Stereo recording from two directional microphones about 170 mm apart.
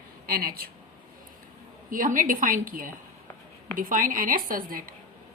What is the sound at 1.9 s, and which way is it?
A woman's voice, 50° right (ahead or behind).